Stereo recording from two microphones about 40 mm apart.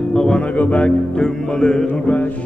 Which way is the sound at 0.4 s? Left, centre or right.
Left.